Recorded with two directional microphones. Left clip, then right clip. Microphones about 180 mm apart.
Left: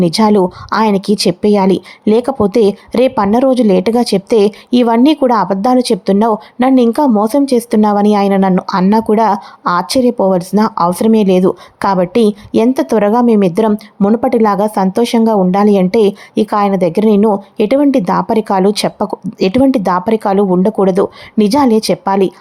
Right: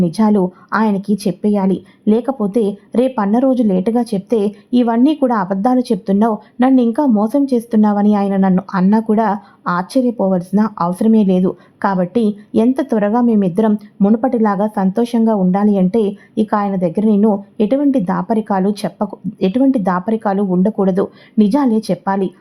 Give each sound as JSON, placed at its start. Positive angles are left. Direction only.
{"t": 0.0, "sound": "speech", "side_deg": 35}